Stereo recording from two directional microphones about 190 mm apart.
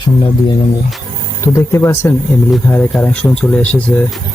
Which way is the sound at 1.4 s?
15° left (ahead or behind).